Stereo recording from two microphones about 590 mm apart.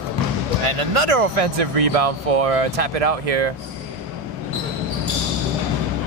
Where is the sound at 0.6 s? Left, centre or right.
Right.